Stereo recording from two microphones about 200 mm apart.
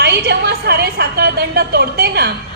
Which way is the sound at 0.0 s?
55° right (ahead or behind).